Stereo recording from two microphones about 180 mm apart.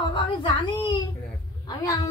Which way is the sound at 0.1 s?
25° left (ahead or behind).